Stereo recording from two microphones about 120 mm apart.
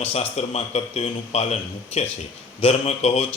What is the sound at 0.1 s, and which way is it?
A man's voice, 60° left (ahead or behind).